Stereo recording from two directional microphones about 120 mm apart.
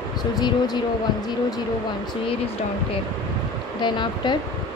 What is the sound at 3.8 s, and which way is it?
Speech, 40° left (ahead or behind).